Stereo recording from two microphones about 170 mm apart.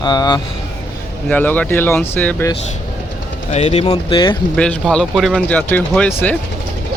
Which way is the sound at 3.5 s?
35° left (ahead or behind).